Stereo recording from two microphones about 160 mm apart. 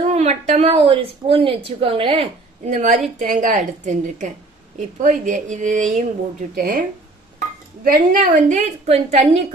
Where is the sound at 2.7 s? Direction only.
55° right (ahead or behind).